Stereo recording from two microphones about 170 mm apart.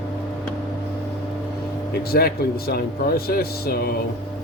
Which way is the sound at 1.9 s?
65° left (ahead or behind).